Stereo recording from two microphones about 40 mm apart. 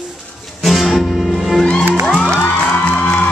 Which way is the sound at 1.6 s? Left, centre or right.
Centre.